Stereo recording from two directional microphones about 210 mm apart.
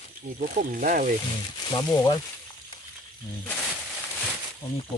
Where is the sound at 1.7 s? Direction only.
15° left (ahead or behind).